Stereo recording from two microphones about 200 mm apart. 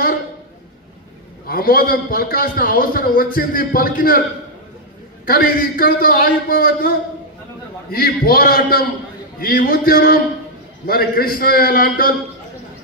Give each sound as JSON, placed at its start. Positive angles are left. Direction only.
{"t": 1.4, "sound": "a man's voice", "side_deg": 50}
{"t": 5.2, "sound": "a man's voice", "side_deg": 45}